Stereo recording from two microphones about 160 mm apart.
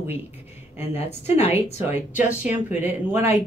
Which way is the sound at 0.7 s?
15° right (ahead or behind).